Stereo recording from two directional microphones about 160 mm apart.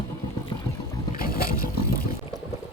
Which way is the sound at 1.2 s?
65° left (ahead or behind).